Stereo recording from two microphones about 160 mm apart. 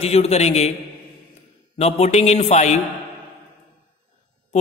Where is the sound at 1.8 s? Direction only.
40° left (ahead or behind).